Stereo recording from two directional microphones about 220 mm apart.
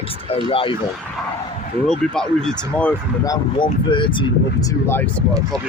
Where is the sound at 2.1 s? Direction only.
Centre (ahead or behind).